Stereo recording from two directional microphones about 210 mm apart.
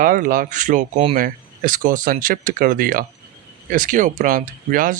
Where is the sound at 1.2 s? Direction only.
40° right (ahead or behind).